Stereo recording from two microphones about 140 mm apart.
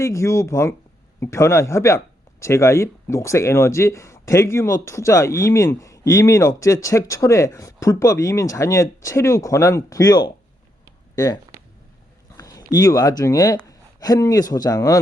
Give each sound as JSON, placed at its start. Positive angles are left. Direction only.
{"t": 0.0, "sound": "speech", "side_deg": 20}
{"t": 12.4, "sound": "a sound", "side_deg": 25}
{"t": 12.7, "sound": "speech", "side_deg": 25}